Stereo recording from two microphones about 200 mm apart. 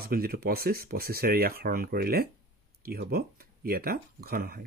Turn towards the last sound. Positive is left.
turn(degrees=-50)  # may be behind; listen again after turning